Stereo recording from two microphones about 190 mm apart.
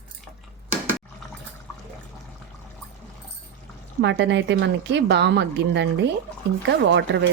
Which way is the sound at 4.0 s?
70° right (ahead or behind).